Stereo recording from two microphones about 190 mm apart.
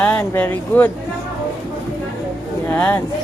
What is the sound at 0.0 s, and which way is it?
Speech, 10° left (ahead or behind).